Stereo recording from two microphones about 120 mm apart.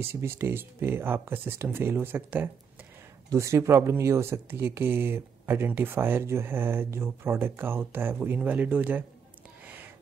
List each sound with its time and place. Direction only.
0.0 s speech: 20° right (ahead or behind)